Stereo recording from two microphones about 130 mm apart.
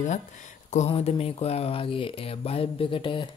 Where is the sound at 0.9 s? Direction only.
50° left (ahead or behind).